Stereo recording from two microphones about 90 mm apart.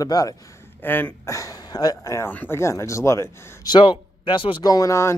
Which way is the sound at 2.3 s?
20° left (ahead or behind).